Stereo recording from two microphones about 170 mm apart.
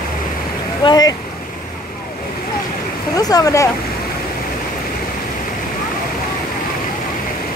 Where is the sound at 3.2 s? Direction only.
20° left (ahead or behind).